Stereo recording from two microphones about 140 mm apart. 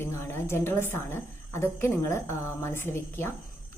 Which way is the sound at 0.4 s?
20° left (ahead or behind).